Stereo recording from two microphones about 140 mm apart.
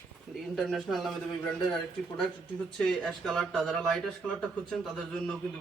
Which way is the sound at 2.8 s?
5° left (ahead or behind).